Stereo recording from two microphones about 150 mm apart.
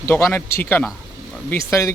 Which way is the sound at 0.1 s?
15° left (ahead or behind).